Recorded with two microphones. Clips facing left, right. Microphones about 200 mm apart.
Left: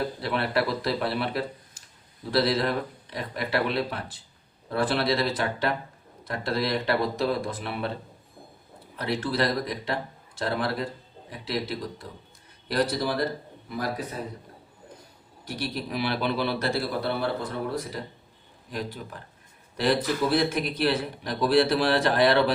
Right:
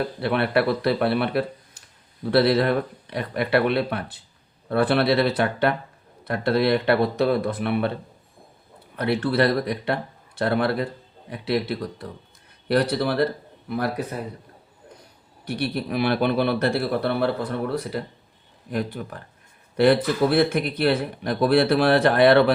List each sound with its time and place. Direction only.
0.2 s speech: 60° right (ahead or behind)
9.0 s a man's voice: 60° right (ahead or behind)
15.4 s speech: 60° right (ahead or behind)